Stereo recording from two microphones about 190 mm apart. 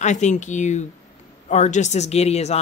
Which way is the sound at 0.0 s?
40° left (ahead or behind).